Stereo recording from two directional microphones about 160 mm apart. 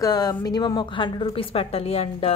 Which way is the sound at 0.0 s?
25° left (ahead or behind).